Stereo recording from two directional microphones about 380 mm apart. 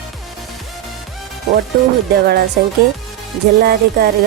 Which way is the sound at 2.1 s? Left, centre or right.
Right.